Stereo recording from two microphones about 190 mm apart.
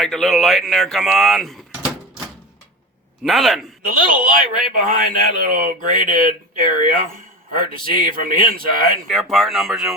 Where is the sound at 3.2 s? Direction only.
Centre (ahead or behind).